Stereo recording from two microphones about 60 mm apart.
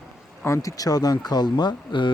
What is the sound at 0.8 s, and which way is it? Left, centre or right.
Speech, left.